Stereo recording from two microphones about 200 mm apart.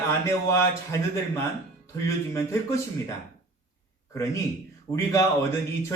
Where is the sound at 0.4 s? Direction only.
15° left (ahead or behind).